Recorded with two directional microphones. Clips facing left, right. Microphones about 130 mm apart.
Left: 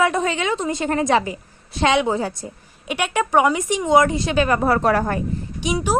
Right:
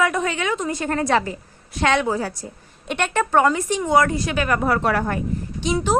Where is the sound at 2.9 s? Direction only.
10° left (ahead or behind); by 5.2 s 35° left (ahead or behind).